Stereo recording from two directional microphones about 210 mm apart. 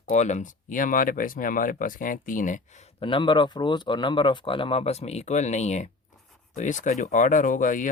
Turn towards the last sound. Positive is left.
turn(degrees=40)  # may be behind; listen again after turning